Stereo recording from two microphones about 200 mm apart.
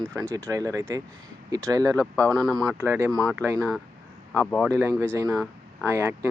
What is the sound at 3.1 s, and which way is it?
Speech, centre (ahead or behind).